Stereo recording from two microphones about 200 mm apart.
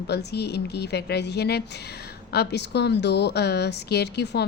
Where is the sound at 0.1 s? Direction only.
55° left (ahead or behind).